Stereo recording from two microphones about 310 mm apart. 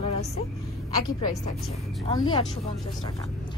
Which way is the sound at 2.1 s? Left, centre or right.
Centre.